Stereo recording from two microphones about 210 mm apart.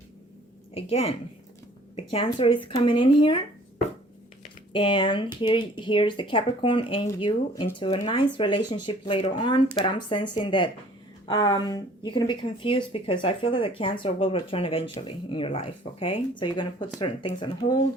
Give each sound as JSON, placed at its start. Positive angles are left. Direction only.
{"t": 0.7, "sound": "speech", "side_deg": 30}
{"t": 4.7, "sound": "speech", "side_deg": 25}